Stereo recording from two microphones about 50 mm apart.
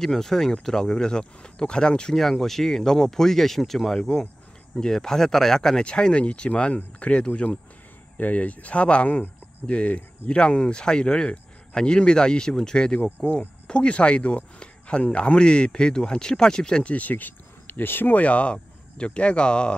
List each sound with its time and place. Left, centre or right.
0.0 s speech: centre
2.4 s speech: centre
4.0 s speech: centre
16.9 s speech: left
18.1 s speech: left